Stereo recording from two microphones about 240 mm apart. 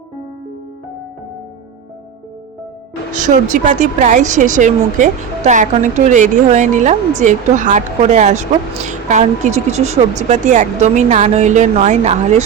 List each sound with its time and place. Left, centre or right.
3.1 s speech: right